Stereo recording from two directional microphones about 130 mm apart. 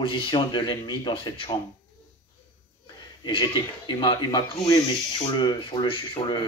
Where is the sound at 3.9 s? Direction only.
30° left (ahead or behind).